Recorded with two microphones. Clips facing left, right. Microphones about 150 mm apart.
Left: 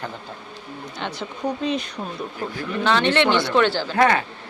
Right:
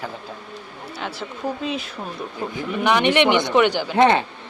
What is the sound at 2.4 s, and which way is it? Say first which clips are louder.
Speech: right 2 dB; 20° right (ahead or behind).